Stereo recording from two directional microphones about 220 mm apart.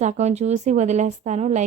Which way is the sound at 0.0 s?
30° right (ahead or behind).